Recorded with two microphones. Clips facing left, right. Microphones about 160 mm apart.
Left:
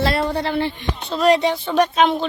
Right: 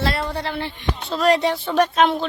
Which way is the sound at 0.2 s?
30° left (ahead or behind).